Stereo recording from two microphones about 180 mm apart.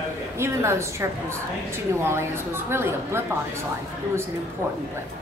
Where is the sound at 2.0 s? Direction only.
15° right (ahead or behind).